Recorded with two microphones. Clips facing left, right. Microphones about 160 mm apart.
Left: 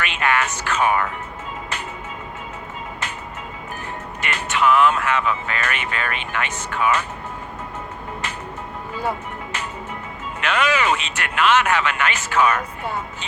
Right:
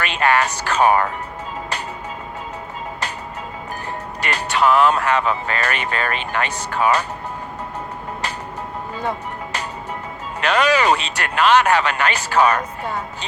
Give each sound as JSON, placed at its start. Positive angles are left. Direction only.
{"t": 0.0, "sound": "speech", "side_deg": -35}
{"t": 4.2, "sound": "speech", "side_deg": -35}
{"t": 10.4, "sound": "speech", "side_deg": -35}